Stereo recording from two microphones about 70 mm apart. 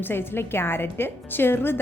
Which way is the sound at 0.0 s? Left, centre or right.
Left.